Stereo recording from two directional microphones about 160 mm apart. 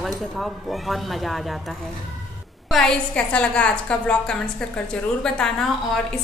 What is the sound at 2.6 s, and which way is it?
A woman's voice, 5° left (ahead or behind).